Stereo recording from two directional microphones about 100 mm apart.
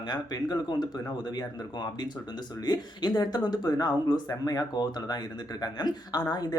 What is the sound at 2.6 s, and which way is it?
Speech, 45° left (ahead or behind).